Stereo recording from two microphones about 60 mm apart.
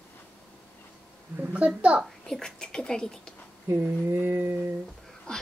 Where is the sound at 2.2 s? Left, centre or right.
Centre.